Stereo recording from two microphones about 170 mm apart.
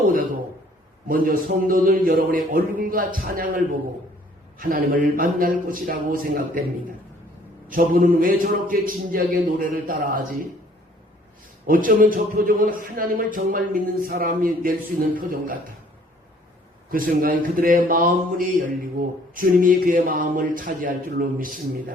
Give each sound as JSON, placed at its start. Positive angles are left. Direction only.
{"t": 1.0, "sound": "a man's voice", "side_deg": -55}
{"t": 7.7, "sound": "a man's voice", "side_deg": -55}
{"t": 11.6, "sound": "a man's voice", "side_deg": -55}
{"t": 16.9, "sound": "a man's voice", "side_deg": -55}